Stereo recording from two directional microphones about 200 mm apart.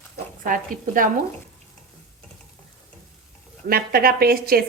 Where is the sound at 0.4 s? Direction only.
45° right (ahead or behind).